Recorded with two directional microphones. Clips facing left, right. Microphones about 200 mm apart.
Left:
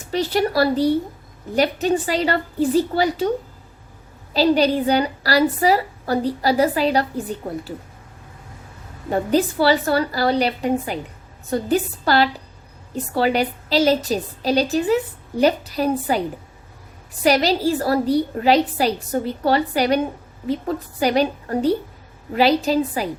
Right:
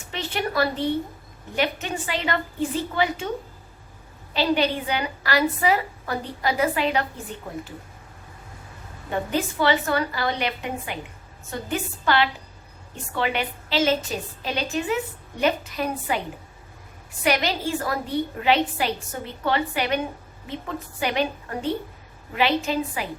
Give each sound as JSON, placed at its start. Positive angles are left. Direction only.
{"t": 0.1, "sound": "a woman's voice", "side_deg": 35}
{"t": 4.4, "sound": "a woman's voice", "side_deg": 35}
{"t": 9.0, "sound": "a woman's voice", "side_deg": 40}
{"t": 17.2, "sound": "a woman's voice", "side_deg": 35}